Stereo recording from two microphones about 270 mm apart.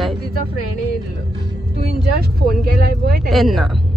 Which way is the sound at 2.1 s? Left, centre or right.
Right.